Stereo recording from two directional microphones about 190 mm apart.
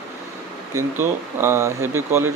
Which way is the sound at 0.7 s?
10° right (ahead or behind).